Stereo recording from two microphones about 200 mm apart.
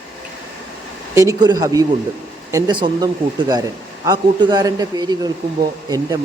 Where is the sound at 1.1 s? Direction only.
15° right (ahead or behind).